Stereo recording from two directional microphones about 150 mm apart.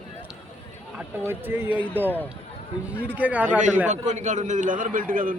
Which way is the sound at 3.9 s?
50° right (ahead or behind).